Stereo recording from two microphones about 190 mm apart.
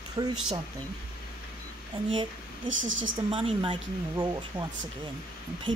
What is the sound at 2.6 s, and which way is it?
Speech, 90° right.